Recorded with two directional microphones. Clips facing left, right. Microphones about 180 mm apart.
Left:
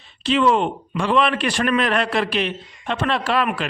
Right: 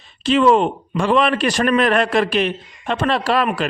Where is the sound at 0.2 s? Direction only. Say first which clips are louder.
Right 4 dB; 45° right (ahead or behind).